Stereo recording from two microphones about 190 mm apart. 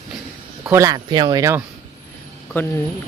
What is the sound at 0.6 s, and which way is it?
Speech, 15° right (ahead or behind).